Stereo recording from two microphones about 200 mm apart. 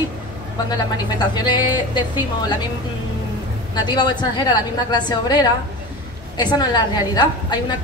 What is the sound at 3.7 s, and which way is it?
A woman's voice, 20° left (ahead or behind).